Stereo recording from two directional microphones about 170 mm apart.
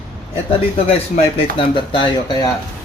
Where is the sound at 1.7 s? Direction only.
30° left (ahead or behind).